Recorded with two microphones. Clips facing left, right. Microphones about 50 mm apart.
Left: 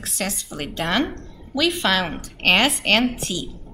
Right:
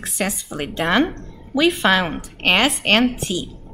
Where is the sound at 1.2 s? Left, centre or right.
Centre.